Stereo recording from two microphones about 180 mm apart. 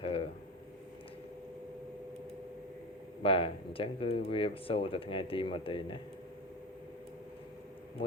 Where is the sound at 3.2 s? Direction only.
30° left (ahead or behind).